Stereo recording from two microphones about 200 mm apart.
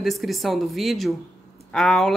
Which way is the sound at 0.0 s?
Centre (ahead or behind).